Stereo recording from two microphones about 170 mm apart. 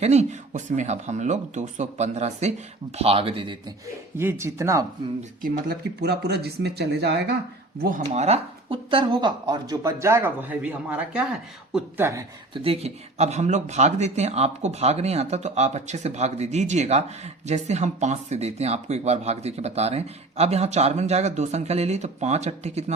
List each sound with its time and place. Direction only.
0.0 s speech: 40° right (ahead or behind)
4.2 s speech: 15° right (ahead or behind)
5.4 s speech: 70° right (ahead or behind)
7.8 s speech: 55° right (ahead or behind); by 12.2 s 15° right (ahead or behind)
12.5 s speech: 35° right (ahead or behind)